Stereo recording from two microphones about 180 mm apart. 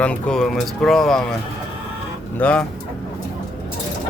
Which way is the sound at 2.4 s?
5° left (ahead or behind).